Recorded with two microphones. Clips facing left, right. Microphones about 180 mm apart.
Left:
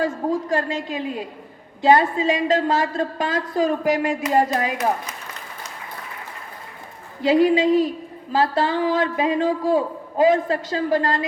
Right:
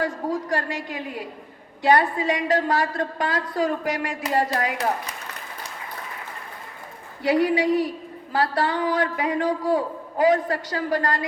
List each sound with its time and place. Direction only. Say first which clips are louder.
0.0 s a woman's voice: left 3 dB; 25° left (ahead or behind)
7.2 s a woman's voice: left 4 dB; 20° left (ahead or behind)